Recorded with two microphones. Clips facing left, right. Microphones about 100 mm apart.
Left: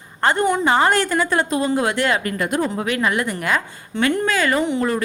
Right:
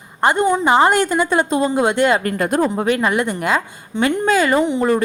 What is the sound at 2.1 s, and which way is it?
A woman's voice, 35° right (ahead or behind).